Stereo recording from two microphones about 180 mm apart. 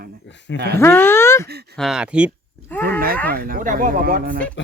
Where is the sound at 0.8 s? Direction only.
15° left (ahead or behind).